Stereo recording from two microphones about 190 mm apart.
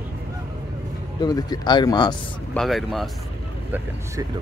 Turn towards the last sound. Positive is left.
turn(degrees=0)  # may be behind; listen again after turning